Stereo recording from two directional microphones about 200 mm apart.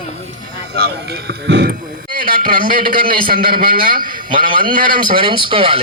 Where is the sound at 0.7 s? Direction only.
55° right (ahead or behind).